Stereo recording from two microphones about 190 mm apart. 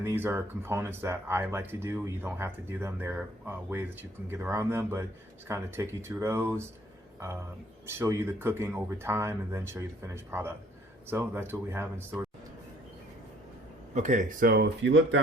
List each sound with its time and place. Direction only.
0.0 s speech: 10° right (ahead or behind)
7.9 s speech: 15° right (ahead or behind)
13.9 s speech: 40° right (ahead or behind); by 15.2 s 65° right (ahead or behind)